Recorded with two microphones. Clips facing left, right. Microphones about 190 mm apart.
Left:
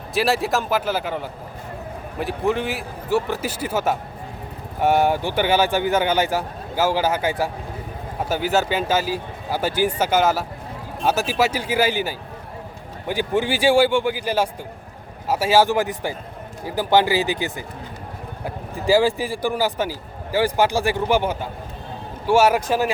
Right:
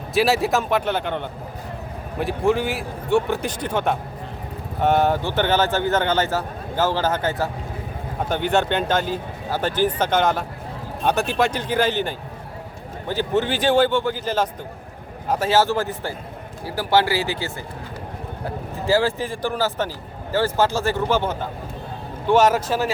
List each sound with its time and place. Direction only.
0.1 s a man's voice: centre (ahead or behind)